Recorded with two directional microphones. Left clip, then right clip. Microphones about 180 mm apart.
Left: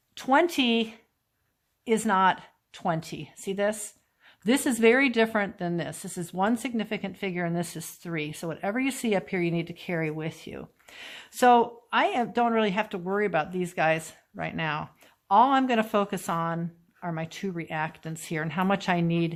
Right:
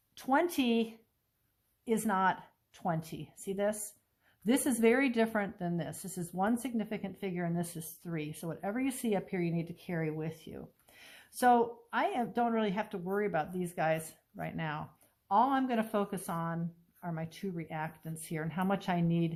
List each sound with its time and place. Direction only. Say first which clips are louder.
0.1 s a woman's voice: left 8 dB; 25° left (ahead or behind)